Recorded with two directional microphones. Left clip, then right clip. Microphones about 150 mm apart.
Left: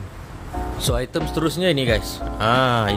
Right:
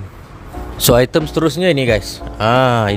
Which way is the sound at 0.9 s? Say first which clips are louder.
Right 13 dB; 90° right.